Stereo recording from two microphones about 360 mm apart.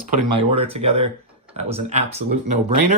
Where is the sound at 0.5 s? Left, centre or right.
Centre.